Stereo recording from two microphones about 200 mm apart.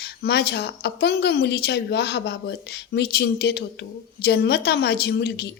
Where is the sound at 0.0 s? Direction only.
55° left (ahead or behind).